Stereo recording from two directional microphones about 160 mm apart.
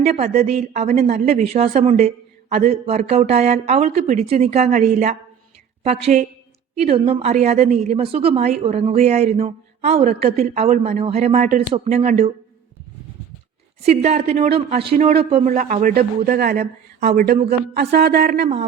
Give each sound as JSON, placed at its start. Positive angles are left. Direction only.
{"t": 0.0, "sound": "a woman's voice", "side_deg": -45}
{"t": 13.8, "sound": "a woman's voice", "side_deg": -45}
{"t": 15.5, "sound": "a man's voice", "side_deg": -55}
{"t": 17.7, "sound": "a sound", "side_deg": -90}